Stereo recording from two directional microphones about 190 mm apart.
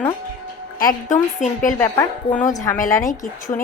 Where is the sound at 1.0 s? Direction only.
40° left (ahead or behind).